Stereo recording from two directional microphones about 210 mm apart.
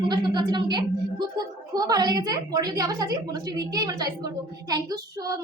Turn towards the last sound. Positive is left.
turn(degrees=-15)  # may be behind; listen again after turning